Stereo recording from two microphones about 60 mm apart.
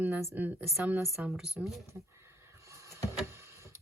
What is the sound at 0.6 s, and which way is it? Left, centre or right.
Speech, centre.